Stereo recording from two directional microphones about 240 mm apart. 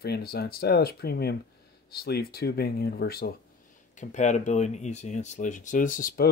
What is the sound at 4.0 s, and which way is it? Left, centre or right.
Speech, left.